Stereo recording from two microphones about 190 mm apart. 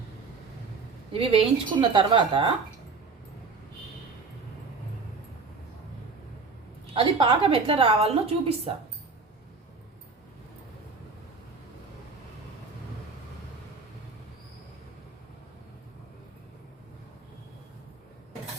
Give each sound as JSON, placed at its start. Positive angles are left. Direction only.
{"t": 1.1, "sound": "a woman's voice", "side_deg": -30}
{"t": 6.9, "sound": "a woman's voice", "side_deg": -25}